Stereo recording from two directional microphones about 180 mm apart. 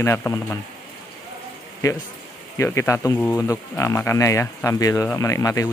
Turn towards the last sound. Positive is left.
turn(degrees=20)  # may be behind; listen again after turning